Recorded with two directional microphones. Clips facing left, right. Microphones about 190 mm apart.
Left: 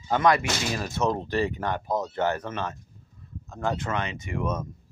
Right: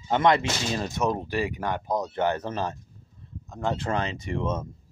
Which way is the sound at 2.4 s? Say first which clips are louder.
Right 2 dB; 35° right (ahead or behind).